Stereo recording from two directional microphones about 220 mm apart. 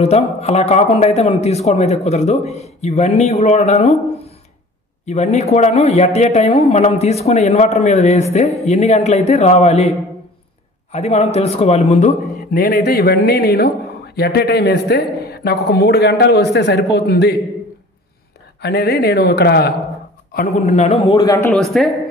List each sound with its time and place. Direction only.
0.0 s speech: 30° left (ahead or behind)
5.0 s speech: 30° left (ahead or behind)
12.5 s a man's voice: 45° left (ahead or behind)
18.6 s a man's voice: 45° left (ahead or behind)
20.3 s speech: 30° left (ahead or behind)
21.2 s speech: 15° left (ahead or behind)
21.5 s speech: centre (ahead or behind)